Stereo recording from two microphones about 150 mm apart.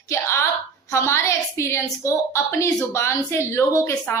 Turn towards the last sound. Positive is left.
turn(degrees=15)  # may be behind; listen again after turning